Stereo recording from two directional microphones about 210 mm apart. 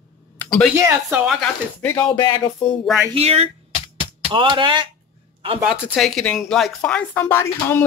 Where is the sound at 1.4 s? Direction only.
10° left (ahead or behind).